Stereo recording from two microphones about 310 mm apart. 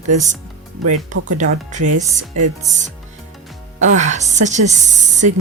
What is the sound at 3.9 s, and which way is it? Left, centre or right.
Speech, right.